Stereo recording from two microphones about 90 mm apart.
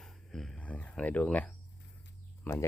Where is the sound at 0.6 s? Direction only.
15° left (ahead or behind).